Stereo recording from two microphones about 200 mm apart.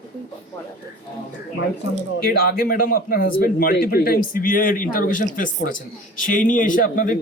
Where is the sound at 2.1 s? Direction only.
50° left (ahead or behind).